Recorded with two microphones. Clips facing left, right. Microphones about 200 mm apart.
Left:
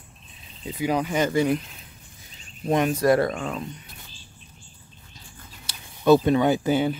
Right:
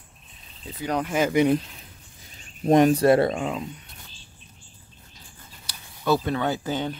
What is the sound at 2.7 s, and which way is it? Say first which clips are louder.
Speech: right 3 dB; 35° right (ahead or behind).